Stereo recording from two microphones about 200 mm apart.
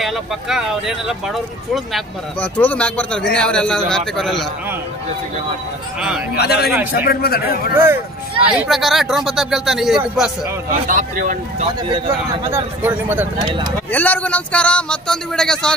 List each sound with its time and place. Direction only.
0.0 s a man's voice: centre (ahead or behind)
5.9 s a man's voice: 5° right (ahead or behind)
6.3 s speech: 55° left (ahead or behind)
7.7 s a man's voice: 10° right (ahead or behind)
10.9 s speech: 40° right (ahead or behind)
12.4 s speech: 10° right (ahead or behind)
13.9 s a man's voice: 10° left (ahead or behind)